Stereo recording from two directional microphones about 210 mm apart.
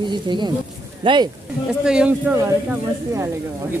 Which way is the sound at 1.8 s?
5° right (ahead or behind).